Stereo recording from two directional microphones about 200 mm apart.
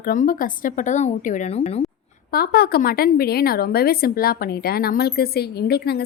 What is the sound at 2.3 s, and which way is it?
A woman's voice, 50° left (ahead or behind).